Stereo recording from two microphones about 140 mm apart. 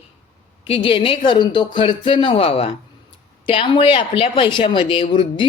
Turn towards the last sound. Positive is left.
turn(degrees=35)  # may be behind; listen again after turning